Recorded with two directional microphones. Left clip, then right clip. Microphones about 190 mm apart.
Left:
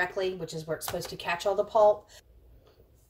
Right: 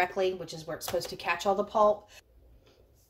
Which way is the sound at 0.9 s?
30° right (ahead or behind).